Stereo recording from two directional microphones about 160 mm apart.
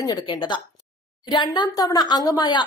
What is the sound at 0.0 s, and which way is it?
A woman's voice, 25° left (ahead or behind).